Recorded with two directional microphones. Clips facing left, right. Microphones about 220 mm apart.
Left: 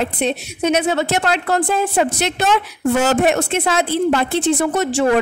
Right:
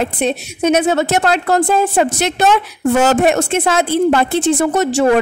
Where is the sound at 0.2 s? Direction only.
45° right (ahead or behind).